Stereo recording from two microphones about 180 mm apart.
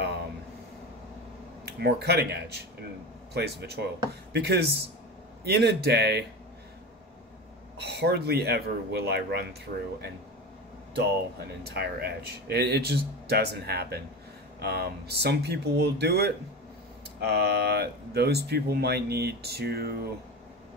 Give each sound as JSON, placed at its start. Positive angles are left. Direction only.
{"t": 1.7, "sound": "a man's voice", "side_deg": -60}
{"t": 7.7, "sound": "speech", "side_deg": -65}